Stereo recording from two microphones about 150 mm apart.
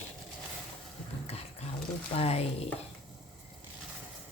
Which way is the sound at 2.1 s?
40° left (ahead or behind).